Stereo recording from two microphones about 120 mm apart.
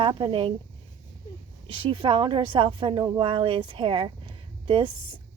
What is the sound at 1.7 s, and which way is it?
A woman's voice, 45° right (ahead or behind).